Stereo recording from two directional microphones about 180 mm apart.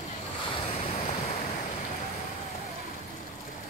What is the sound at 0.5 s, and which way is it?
Waves, 30° left (ahead or behind).